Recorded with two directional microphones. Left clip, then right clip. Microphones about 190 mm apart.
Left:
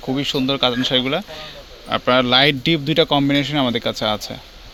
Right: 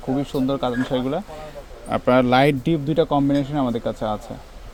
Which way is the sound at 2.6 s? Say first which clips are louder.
Left 3 dB; 5° left (ahead or behind).